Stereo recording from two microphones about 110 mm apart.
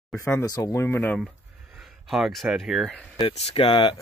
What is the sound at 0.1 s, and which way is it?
Speech, 25° left (ahead or behind).